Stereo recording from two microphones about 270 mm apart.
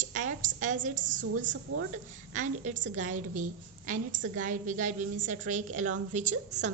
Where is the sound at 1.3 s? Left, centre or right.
Right.